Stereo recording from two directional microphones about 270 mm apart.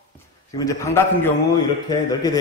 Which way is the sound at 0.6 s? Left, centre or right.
Centre.